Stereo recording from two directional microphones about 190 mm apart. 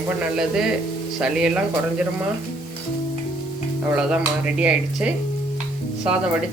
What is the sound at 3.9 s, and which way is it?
Stir, 5° right (ahead or behind).